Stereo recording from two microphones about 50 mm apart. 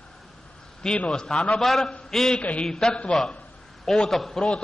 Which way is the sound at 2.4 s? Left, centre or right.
Left.